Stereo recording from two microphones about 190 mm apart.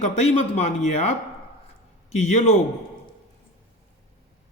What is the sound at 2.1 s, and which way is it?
Speech, 35° left (ahead or behind).